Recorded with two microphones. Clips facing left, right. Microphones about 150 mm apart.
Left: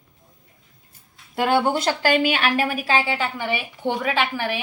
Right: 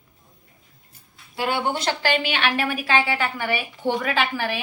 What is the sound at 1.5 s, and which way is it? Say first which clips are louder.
A woman's voice: left 4 dB; 45° left (ahead or behind).